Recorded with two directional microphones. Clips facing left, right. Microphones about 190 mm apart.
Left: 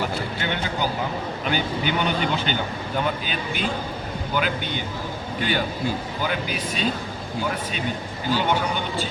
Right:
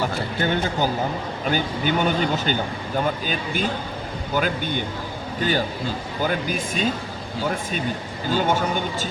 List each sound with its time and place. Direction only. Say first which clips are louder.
0.3 s a man's voice: right 4 dB; 45° right (ahead or behind)
8.4 s speech: right 3 dB; 45° right (ahead or behind)